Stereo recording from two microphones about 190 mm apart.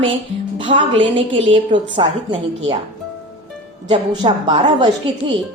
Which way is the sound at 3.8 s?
25° right (ahead or behind).